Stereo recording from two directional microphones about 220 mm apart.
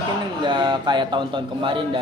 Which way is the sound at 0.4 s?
20° right (ahead or behind).